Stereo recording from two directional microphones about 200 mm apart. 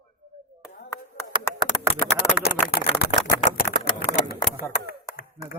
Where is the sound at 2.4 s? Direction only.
50° left (ahead or behind).